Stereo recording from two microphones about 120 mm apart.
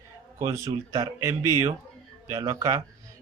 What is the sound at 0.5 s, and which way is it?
Speech, 30° right (ahead or behind).